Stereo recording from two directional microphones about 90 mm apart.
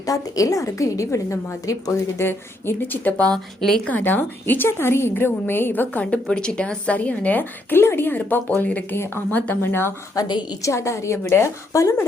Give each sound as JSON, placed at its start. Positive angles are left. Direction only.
{"t": 0.0, "sound": "a woman's voice", "side_deg": 40}
{"t": 3.8, "sound": "a woman's voice", "side_deg": 20}
{"t": 10.2, "sound": "a woman's voice", "side_deg": 55}
{"t": 10.6, "sound": "a woman's voice", "side_deg": 35}